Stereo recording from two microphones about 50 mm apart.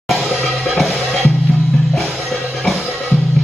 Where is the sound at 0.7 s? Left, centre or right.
Centre.